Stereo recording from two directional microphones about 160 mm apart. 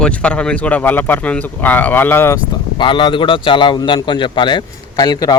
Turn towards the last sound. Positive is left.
turn(degrees=25)  # may be behind; listen again after turning